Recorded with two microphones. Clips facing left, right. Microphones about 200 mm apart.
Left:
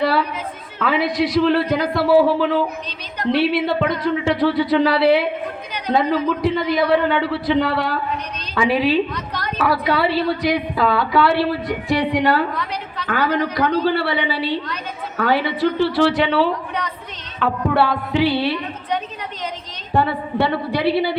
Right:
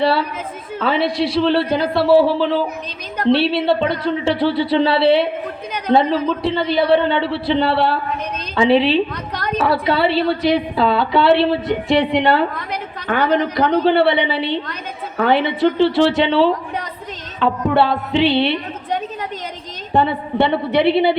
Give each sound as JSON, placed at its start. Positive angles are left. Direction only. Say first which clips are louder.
{"t": 0.0, "sound": "a woman's voice", "louder": "right 2 dB", "side_deg": -30}
{"t": 9.1, "sound": "a sound", "louder": "right 3 dB", "side_deg": -50}
{"t": 9.6, "sound": "a woman's voice", "louder": "right 2 dB", "side_deg": -25}
{"t": 19.9, "sound": "a woman's voice", "louder": "right 2 dB", "side_deg": -20}